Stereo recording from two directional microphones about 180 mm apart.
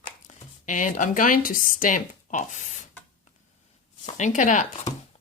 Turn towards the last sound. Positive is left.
turn(degrees=40)  # may be behind; listen again after turning